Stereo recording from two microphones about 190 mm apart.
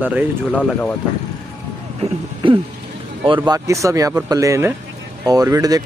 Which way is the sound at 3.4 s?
15° right (ahead or behind).